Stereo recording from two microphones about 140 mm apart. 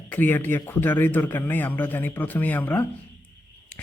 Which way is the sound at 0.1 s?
15° left (ahead or behind).